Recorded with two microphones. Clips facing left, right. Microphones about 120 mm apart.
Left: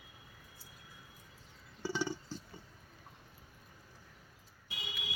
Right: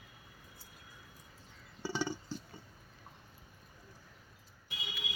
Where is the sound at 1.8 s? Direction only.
20° right (ahead or behind).